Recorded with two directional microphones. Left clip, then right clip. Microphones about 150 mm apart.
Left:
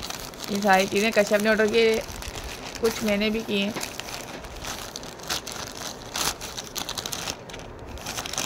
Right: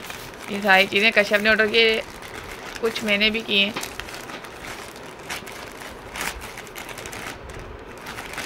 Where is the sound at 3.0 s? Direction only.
20° left (ahead or behind).